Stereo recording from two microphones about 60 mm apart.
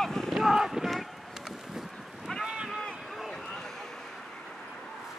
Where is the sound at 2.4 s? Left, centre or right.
Centre.